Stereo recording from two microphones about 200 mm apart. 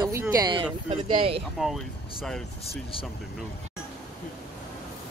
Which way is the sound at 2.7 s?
25° left (ahead or behind).